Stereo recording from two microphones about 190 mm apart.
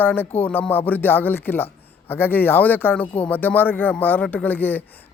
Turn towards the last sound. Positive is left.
turn(degrees=10)  # may be behind; listen again after turning